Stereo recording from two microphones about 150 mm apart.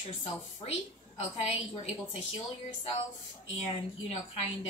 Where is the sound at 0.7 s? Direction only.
45° left (ahead or behind).